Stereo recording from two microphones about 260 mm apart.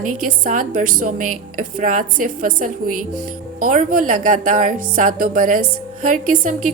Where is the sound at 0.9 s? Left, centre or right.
Right.